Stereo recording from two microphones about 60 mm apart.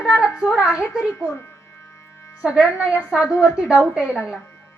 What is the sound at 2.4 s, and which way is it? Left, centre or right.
A woman's voice, centre.